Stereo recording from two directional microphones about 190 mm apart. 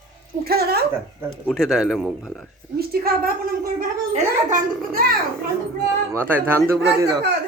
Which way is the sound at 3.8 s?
40° right (ahead or behind).